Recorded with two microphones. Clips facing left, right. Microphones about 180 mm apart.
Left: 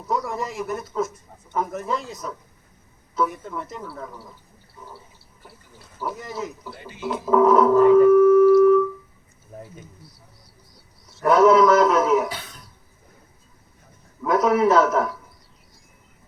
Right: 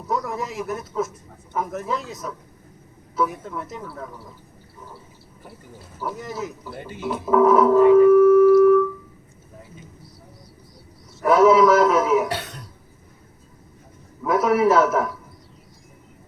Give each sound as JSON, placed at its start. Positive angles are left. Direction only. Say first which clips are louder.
{"t": 0.3, "sound": "speech", "louder": "even", "side_deg": 0}
{"t": 6.0, "sound": "speech", "louder": "even", "side_deg": 0}
{"t": 7.0, "sound": "a sound", "louder": "even", "side_deg": -5}
{"t": 11.2, "sound": "a man's voice", "louder": "even", "side_deg": -5}
{"t": 12.3, "sound": "cough", "louder": "right 7 dB", "side_deg": -75}
{"t": 14.2, "sound": "a man's voice", "louder": "even", "side_deg": -5}